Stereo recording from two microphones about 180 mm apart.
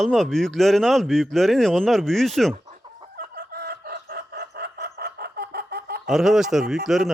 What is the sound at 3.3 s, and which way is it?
Chicken, 60° right (ahead or behind).